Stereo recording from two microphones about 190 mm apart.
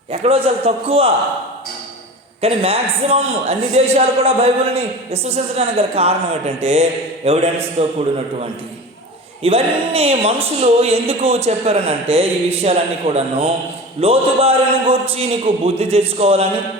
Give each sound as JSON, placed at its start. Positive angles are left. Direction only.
{"t": 0.1, "sound": "a man's voice", "side_deg": -30}
{"t": 2.4, "sound": "a man's voice", "side_deg": -30}
{"t": 9.4, "sound": "a man's voice", "side_deg": -30}